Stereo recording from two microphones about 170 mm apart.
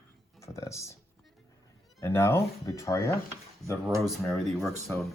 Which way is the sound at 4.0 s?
Centre (ahead or behind).